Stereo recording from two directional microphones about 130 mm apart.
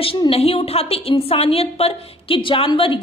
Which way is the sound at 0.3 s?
50° left (ahead or behind).